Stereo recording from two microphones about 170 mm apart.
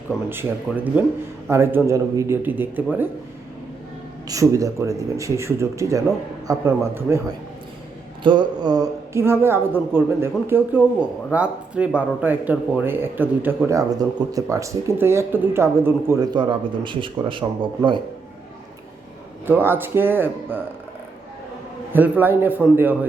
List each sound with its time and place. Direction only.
0.3 s speech: 10° right (ahead or behind)
4.3 s speech: 20° right (ahead or behind)
8.2 s speech: 25° right (ahead or behind)
19.5 s speech: 10° right (ahead or behind)
21.9 s speech: 10° right (ahead or behind)